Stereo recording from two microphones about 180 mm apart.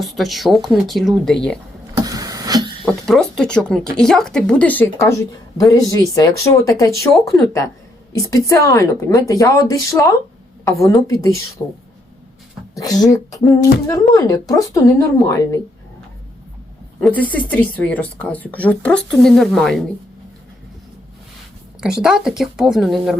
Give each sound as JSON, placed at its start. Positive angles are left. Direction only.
{"t": 0.0, "sound": "speech", "side_deg": 0}
{"t": 2.0, "sound": "a sound", "side_deg": -20}
{"t": 2.8, "sound": "speech", "side_deg": 5}
{"t": 12.7, "sound": "speech", "side_deg": 20}
{"t": 17.0, "sound": "speech", "side_deg": 10}
{"t": 21.8, "sound": "speech", "side_deg": -5}